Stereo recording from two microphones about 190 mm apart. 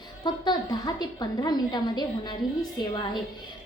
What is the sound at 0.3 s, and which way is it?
A woman's voice, 20° left (ahead or behind).